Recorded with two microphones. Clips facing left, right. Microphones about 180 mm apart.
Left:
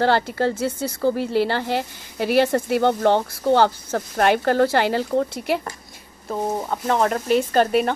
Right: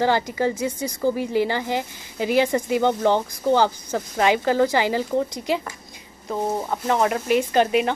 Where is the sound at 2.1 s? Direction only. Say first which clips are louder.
Left 2 dB; 65° left (ahead or behind).